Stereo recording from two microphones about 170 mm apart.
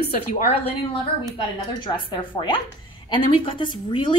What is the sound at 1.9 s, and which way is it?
A woman's voice, 25° left (ahead or behind).